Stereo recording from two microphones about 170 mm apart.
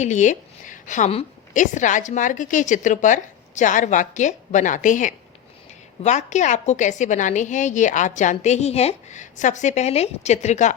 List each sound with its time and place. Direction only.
0.0 s a woman's voice: 45° left (ahead or behind)